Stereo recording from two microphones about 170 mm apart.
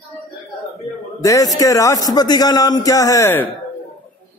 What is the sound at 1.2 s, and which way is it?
Speech, 20° left (ahead or behind).